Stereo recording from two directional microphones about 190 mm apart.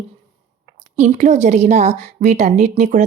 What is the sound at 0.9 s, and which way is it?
A woman's voice, 40° right (ahead or behind).